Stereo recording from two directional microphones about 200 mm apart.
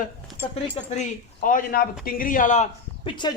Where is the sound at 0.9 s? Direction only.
40° left (ahead or behind).